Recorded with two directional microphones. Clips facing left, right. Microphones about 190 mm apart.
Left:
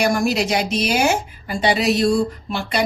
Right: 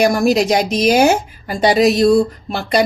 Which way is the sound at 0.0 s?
40° right (ahead or behind).